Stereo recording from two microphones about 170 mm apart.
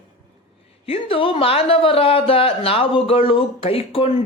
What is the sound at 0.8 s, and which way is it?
Speech, 35° left (ahead or behind).